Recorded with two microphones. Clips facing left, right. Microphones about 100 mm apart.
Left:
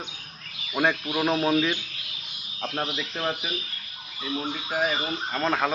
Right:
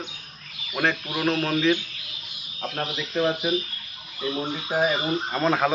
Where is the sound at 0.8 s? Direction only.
15° left (ahead or behind).